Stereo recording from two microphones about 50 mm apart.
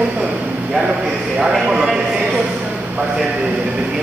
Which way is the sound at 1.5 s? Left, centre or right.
Centre.